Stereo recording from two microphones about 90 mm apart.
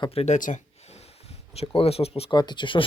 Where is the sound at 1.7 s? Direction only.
90° left.